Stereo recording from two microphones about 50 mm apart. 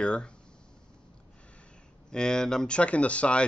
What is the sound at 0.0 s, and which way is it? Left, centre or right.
Speech, left.